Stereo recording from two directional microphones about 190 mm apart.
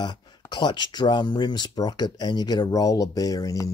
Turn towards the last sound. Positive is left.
turn(degrees=15)  # may be behind; listen again after turning